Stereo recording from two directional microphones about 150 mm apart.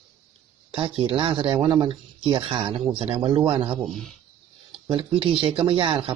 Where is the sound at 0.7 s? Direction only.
40° right (ahead or behind).